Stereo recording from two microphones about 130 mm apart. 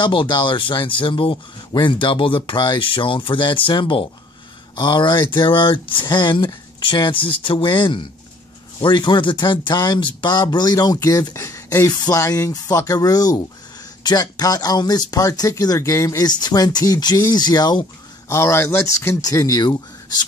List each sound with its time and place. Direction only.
0.0 s speech: 40° left (ahead or behind)
18.3 s speech: 20° left (ahead or behind)